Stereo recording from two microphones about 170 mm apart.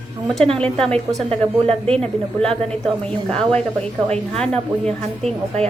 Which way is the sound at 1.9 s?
5° left (ahead or behind).